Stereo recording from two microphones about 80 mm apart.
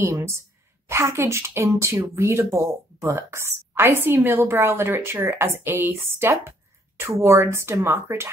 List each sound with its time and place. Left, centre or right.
0.0 s speech: right